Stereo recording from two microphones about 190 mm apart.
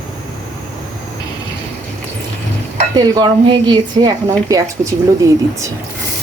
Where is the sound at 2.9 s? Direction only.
20° right (ahead or behind).